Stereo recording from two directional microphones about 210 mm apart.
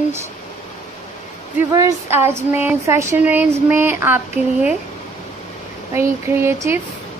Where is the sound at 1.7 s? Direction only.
15° right (ahead or behind).